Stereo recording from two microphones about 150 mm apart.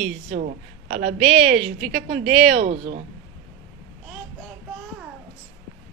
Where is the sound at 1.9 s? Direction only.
90° right.